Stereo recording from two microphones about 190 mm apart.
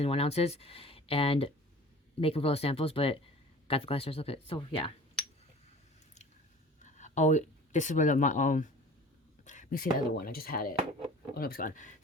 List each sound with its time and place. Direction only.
0.0 s speech: 30° left (ahead or behind)
6.8 s speech: 40° left (ahead or behind)